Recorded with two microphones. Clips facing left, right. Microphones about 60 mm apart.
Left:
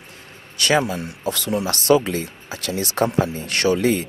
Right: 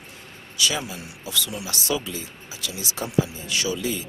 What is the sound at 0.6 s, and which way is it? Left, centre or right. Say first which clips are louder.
Speech: left 8 dB; left.